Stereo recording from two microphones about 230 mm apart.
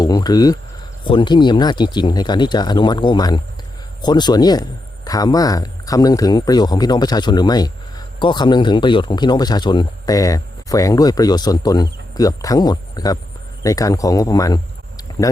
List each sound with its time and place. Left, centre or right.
0.0 s a man's voice: centre